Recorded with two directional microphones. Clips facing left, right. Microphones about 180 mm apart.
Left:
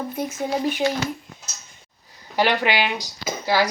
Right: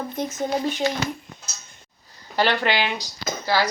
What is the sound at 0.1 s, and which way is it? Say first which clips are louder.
Speech: even; 10° left (ahead or behind).